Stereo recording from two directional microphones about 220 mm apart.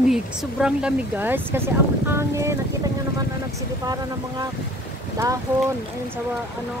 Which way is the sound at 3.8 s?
15° right (ahead or behind).